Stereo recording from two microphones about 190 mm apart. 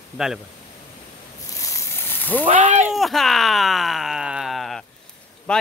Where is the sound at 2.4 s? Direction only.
40° right (ahead or behind).